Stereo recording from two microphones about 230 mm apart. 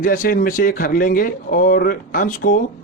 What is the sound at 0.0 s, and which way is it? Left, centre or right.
Speech, left.